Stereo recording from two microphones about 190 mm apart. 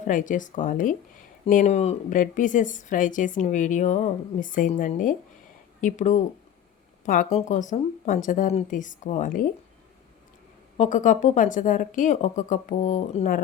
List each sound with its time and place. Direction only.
0.1 s a woman's voice: 45° left (ahead or behind)
10.8 s speech: 40° left (ahead or behind)